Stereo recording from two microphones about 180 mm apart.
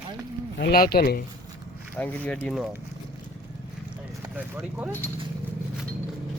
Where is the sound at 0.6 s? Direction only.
60° left (ahead or behind).